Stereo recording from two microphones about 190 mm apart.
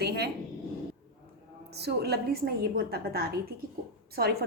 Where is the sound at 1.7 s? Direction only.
60° right (ahead or behind).